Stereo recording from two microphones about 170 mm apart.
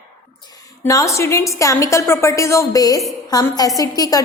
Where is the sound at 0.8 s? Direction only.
20° left (ahead or behind).